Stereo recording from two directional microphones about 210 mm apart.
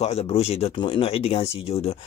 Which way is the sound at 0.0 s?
30° left (ahead or behind).